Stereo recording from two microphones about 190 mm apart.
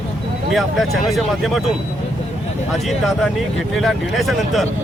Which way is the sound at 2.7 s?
Centre (ahead or behind).